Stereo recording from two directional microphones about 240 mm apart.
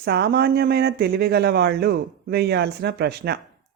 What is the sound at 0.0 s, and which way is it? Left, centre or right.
Speech, right.